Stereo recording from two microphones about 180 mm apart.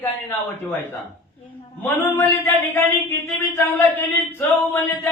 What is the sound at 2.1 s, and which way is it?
Speech, 10° left (ahead or behind).